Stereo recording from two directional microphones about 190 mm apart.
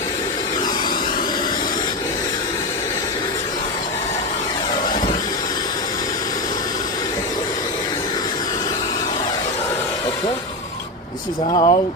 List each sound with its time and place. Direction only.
11.5 s speech: 30° left (ahead or behind)